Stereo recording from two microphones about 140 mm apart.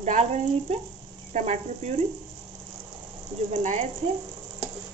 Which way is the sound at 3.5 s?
60° right (ahead or behind).